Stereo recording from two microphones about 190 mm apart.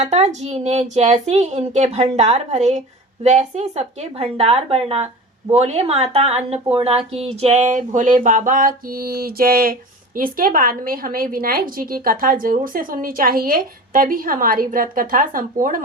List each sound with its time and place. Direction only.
0.0 s a woman's voice: 40° right (ahead or behind)